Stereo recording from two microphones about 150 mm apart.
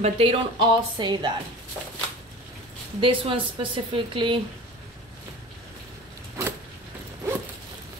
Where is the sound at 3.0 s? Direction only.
35° right (ahead or behind).